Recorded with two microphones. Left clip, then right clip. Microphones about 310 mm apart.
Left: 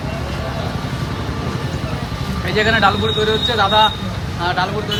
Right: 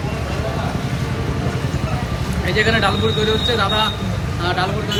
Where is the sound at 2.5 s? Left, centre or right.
Left.